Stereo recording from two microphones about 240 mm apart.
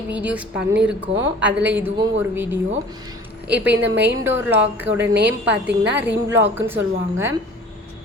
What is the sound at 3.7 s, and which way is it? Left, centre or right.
Speech, right.